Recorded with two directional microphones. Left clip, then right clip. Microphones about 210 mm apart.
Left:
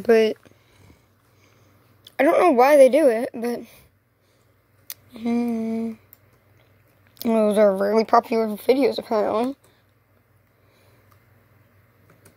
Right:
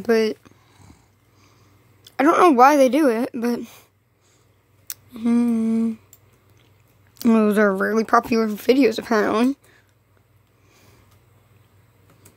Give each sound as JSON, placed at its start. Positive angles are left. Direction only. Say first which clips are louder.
{"t": 0.0, "sound": "a sound", "louder": "left 2 dB", "side_deg": -10}
{"t": 2.3, "sound": "speech", "louder": "right 1 dB", "side_deg": -25}
{"t": 4.8, "sound": "humming", "louder": "right 3 dB", "side_deg": -20}
{"t": 7.2, "sound": "speech", "louder": "even", "side_deg": -25}